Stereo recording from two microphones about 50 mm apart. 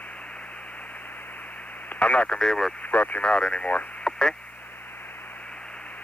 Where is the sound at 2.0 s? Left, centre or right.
Left.